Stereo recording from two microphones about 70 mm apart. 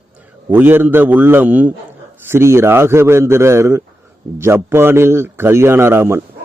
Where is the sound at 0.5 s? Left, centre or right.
Right.